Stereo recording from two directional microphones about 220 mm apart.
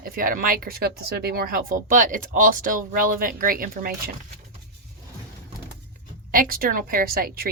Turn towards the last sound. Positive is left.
turn(degrees=-40)  # may be behind; listen again after turning